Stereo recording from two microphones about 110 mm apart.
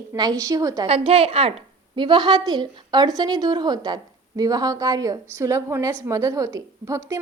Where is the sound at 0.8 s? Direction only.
65° right (ahead or behind).